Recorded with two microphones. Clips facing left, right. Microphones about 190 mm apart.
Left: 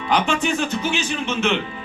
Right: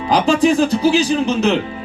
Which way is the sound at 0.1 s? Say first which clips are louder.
Right 7 dB; 35° right (ahead or behind).